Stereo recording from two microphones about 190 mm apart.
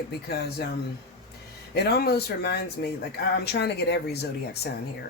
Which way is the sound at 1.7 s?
55° left (ahead or behind).